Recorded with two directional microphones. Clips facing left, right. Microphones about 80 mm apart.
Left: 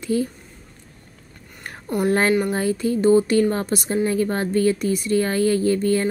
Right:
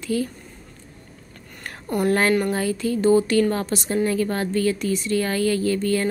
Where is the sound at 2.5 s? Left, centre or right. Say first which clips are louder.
Left 2 dB; left.